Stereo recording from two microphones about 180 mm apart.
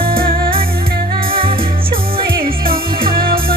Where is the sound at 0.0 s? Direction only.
55° right (ahead or behind).